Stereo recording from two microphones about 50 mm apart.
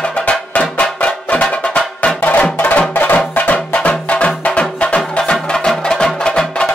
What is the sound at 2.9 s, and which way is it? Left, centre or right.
Music, left.